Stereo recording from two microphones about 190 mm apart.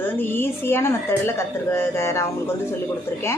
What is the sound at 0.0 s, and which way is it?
Speech, 10° left (ahead or behind).